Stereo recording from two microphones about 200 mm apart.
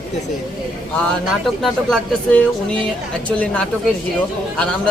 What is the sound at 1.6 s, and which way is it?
Speech, 5° left (ahead or behind).